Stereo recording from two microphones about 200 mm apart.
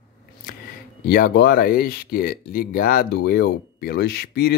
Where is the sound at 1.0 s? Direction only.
50° left (ahead or behind).